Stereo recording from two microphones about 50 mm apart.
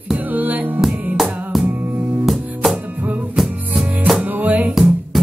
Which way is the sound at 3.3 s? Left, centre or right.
Centre.